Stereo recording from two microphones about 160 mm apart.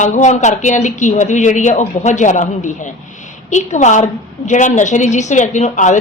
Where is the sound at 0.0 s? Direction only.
50° left (ahead or behind).